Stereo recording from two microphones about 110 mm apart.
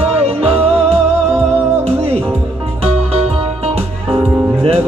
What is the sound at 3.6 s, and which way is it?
Music, 65° right (ahead or behind).